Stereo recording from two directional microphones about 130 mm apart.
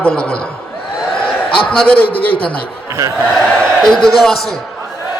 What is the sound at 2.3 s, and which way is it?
Speech, 45° left (ahead or behind).